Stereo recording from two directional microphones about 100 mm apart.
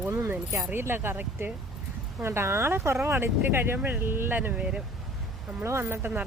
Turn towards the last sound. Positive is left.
turn(degrees=-20)  # may be behind; listen again after turning